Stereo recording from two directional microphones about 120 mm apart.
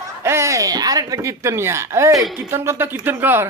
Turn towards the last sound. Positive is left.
turn(degrees=-15)  # may be behind; listen again after turning